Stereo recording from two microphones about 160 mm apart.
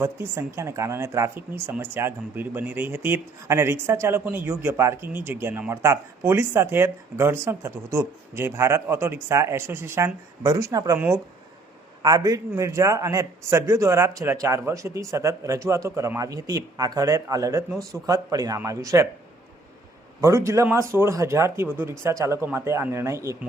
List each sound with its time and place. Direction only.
0.0 s speech: 15° right (ahead or behind)
12.0 s a man's voice: 20° right (ahead or behind)
20.2 s speech: 20° right (ahead or behind)